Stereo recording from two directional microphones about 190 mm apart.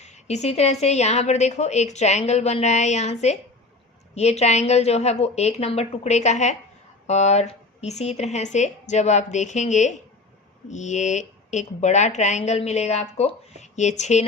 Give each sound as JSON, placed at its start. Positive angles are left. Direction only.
{"t": 0.0, "sound": "speech", "side_deg": 35}